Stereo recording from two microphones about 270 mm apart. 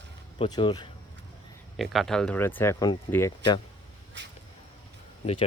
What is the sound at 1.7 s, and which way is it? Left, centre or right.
Speech, centre.